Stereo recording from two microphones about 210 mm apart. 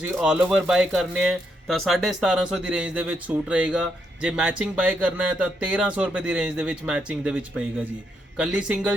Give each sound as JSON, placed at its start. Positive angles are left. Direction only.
{"t": 0.2, "sound": "speech", "side_deg": -5}